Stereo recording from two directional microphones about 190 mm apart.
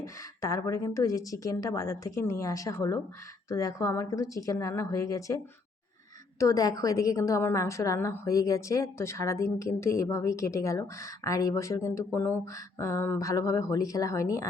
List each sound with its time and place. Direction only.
0.0 s a woman's voice: 15° left (ahead or behind)
6.4 s a woman's voice: 20° left (ahead or behind)